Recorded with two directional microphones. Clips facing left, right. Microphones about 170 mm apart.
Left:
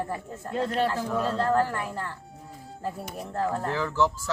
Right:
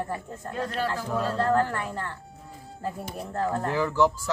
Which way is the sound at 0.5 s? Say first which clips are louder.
Left 4 dB; 25° left (ahead or behind).